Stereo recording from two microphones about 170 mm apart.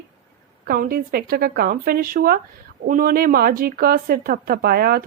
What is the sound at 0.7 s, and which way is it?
Speech, 60° right (ahead or behind).